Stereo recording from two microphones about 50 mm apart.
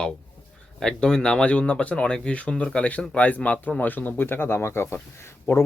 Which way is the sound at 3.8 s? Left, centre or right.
Left.